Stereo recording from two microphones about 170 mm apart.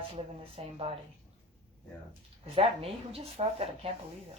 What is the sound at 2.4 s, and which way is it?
A woman's voice, 35° right (ahead or behind).